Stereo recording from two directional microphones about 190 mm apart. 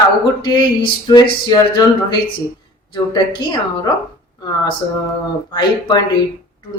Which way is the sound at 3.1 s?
25° left (ahead or behind).